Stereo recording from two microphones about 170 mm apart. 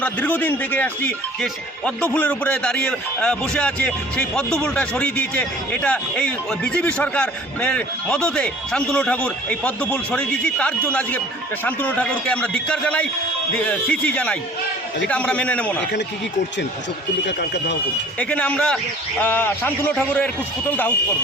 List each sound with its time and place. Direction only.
0.0 s a man's voice: 10° left (ahead or behind)
17.2 s speech: 90° left
18.2 s a man's voice: 5° left (ahead or behind)